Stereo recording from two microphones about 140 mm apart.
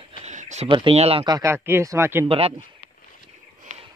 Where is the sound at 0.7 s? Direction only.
40° right (ahead or behind).